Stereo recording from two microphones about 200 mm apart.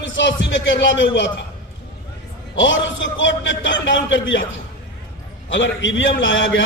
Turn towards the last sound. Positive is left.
turn(degrees=70)  # may be behind; listen again after turning